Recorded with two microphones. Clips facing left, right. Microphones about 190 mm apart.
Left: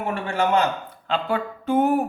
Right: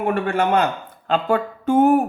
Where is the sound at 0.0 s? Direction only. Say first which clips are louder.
Right 4 dB; 55° right (ahead or behind).